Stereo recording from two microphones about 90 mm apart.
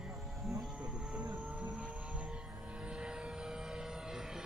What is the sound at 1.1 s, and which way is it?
Vehicle, 15° right (ahead or behind).